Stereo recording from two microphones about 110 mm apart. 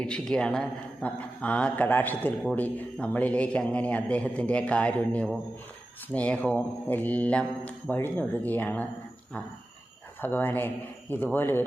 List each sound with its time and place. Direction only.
0.0 s a man's voice: 5° left (ahead or behind)
10.2 s a man's voice: 20° left (ahead or behind)